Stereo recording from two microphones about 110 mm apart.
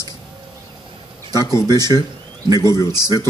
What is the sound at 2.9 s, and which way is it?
Speech, 35° right (ahead or behind).